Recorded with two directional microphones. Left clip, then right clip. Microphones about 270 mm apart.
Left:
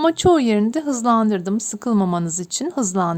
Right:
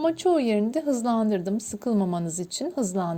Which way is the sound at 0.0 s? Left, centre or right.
Centre.